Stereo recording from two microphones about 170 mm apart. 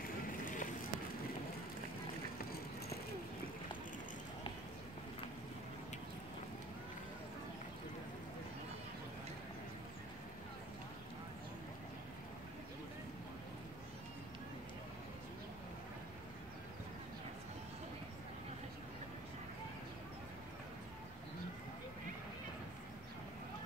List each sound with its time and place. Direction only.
0.3 s run: 50° left (ahead or behind)